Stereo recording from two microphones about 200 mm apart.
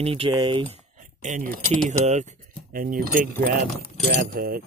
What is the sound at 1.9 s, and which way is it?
Speech, 35° right (ahead or behind).